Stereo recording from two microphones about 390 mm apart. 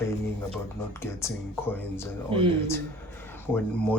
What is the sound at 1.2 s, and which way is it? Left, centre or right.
Speech, centre.